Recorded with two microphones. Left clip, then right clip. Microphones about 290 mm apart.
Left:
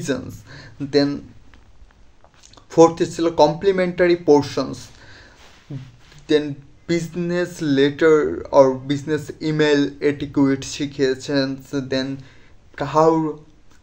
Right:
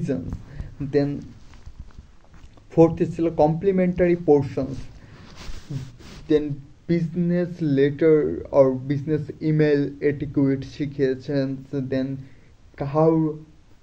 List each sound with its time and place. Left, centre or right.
0.8 s speech: left
2.7 s speech: left
6.2 s speech: centre